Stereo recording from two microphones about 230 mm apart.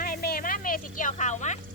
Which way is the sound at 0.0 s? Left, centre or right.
Left.